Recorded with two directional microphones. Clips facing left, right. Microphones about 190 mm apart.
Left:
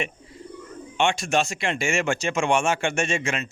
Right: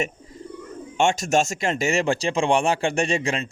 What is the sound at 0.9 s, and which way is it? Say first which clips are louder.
Speech: right 3 dB; 45° right (ahead or behind).